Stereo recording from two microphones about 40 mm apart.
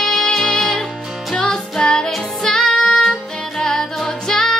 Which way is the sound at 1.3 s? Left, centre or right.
Left.